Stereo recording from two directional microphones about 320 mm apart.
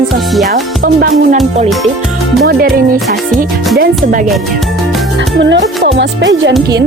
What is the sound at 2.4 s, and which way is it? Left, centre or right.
Music, right.